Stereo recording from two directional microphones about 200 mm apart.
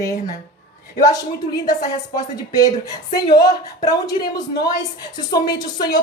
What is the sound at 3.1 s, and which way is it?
Speech, 20° left (ahead or behind).